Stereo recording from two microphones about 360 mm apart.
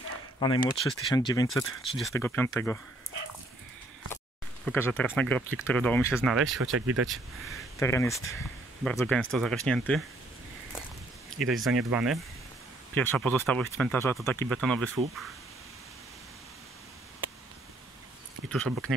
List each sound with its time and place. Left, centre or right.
0.4 s speech: centre
4.6 s speech: centre
6.6 s speech: right
7.1 s speech: centre
11.3 s speech: centre
18.5 s speech: centre